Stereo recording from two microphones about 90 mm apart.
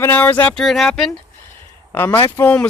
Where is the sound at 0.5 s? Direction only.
Centre (ahead or behind).